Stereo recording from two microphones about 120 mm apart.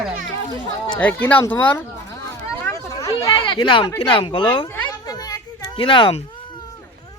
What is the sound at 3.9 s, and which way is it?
Speech, 50° left (ahead or behind).